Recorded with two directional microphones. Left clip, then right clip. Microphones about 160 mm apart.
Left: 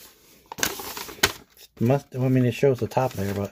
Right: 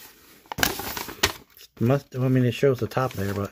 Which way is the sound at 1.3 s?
10° right (ahead or behind).